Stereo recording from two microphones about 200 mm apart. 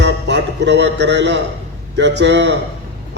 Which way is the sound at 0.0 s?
60° right (ahead or behind).